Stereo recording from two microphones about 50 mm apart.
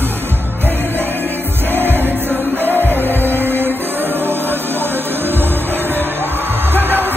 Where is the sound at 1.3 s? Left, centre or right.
Right.